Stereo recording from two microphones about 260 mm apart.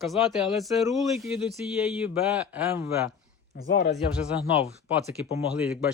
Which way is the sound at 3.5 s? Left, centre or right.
Left.